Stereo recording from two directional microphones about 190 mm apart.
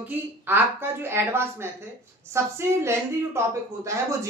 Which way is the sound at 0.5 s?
10° right (ahead or behind).